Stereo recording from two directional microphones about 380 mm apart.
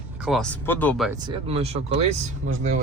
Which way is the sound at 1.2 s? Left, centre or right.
Centre.